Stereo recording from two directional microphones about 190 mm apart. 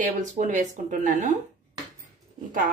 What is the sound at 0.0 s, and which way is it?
A woman's voice, 40° right (ahead or behind).